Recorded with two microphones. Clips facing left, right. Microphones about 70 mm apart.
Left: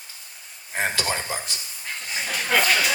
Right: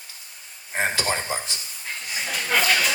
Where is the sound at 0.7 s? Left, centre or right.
Right.